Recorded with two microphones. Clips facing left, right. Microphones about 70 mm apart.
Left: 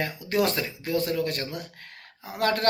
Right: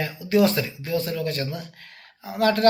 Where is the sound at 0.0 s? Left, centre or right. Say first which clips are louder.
Right 5 dB; left.